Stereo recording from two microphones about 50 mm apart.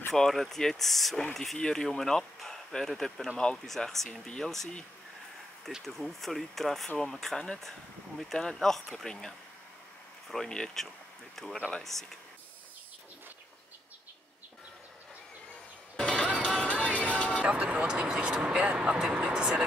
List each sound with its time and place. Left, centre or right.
0.1 s speech: centre
5.7 s speech: centre
10.5 s speech: centre
16.0 s music: left
17.4 s speech: right